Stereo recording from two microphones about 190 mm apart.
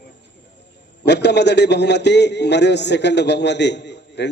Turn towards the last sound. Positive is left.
turn(degrees=65)  # may be behind; listen again after turning